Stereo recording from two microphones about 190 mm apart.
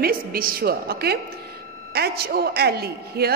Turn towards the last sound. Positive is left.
turn(degrees=-55)  # may be behind; listen again after turning